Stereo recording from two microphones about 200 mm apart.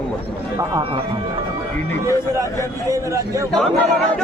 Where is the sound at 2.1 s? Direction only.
15° right (ahead or behind).